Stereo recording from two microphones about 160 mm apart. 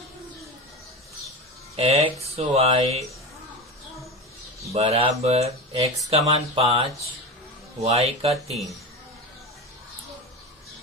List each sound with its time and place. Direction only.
1.7 s speech: 40° right (ahead or behind)
4.7 s speech: 40° right (ahead or behind)